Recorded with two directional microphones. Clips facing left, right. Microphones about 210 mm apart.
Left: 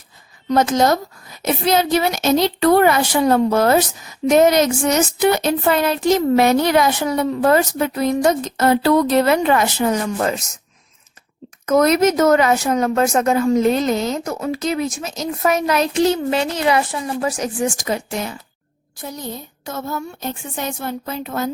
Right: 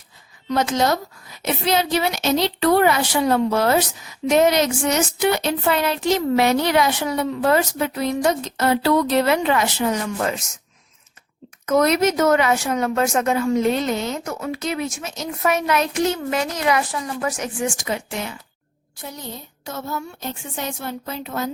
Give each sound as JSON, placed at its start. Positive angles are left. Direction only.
{"t": 0.4, "sound": "a woman's voice", "side_deg": 40}
{"t": 11.6, "sound": "speech", "side_deg": 45}
{"t": 19.6, "sound": "a woman's voice", "side_deg": 50}